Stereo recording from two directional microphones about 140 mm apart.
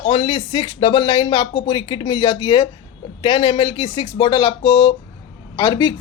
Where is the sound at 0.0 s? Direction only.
40° left (ahead or behind).